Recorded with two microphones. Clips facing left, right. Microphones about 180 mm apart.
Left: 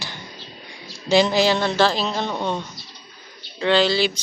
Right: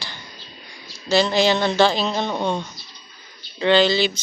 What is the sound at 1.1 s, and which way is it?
Speech, 15° left (ahead or behind).